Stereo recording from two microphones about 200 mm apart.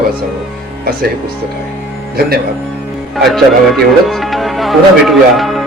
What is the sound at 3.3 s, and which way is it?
Speech, centre (ahead or behind).